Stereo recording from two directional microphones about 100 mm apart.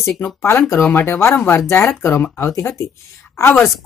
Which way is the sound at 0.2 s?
20° left (ahead or behind).